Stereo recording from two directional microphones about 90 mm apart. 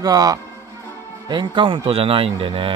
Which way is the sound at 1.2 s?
60° right (ahead or behind).